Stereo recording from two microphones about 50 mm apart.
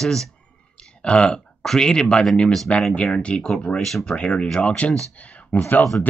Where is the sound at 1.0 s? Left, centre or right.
Left.